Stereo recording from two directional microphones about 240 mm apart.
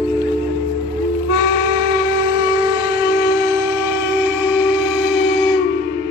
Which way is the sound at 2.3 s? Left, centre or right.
Centre.